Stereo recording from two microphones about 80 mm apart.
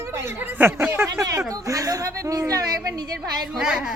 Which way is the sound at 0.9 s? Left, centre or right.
Right.